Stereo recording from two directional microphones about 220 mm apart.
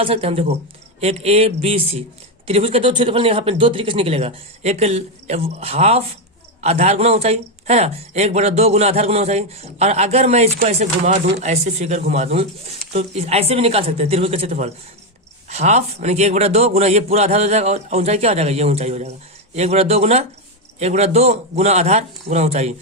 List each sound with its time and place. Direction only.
0.0 s speech: 25° right (ahead or behind)